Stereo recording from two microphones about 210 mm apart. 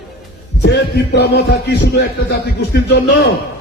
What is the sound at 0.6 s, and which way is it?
A man's voice, 50° left (ahead or behind).